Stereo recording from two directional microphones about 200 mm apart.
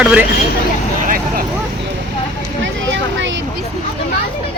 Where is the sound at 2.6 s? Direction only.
65° right (ahead or behind).